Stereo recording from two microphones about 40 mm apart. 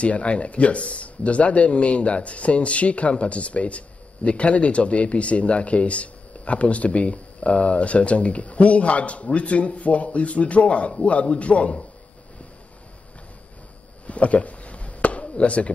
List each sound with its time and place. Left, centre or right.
0.0 s speech: left
14.0 s chop: left